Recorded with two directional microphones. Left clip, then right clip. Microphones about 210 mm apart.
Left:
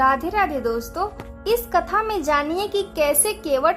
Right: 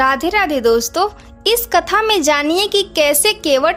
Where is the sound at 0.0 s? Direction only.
30° right (ahead or behind).